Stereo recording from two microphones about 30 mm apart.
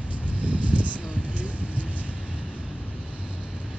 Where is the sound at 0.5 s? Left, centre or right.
Right.